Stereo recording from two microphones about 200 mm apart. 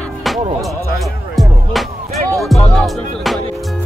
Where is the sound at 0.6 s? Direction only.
Centre (ahead or behind).